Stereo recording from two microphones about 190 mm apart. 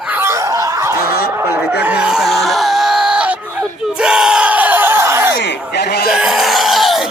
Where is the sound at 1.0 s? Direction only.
50° left (ahead or behind).